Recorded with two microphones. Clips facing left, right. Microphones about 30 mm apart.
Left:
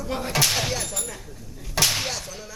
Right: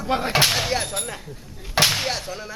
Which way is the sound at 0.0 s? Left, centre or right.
Right.